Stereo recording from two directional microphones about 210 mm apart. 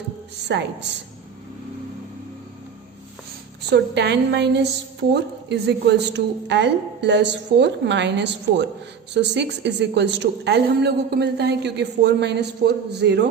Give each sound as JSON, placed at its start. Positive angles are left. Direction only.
{"t": 0.4, "sound": "a woman's voice", "side_deg": -55}
{"t": 3.7, "sound": "a woman's voice", "side_deg": -55}